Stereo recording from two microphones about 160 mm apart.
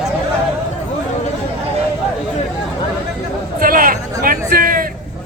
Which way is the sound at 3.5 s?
60° right (ahead or behind).